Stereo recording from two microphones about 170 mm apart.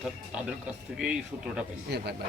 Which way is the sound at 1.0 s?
5° right (ahead or behind).